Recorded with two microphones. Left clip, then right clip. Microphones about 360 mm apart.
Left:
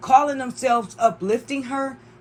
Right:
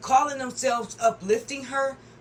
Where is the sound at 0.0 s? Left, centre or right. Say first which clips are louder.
Left 5 dB; centre.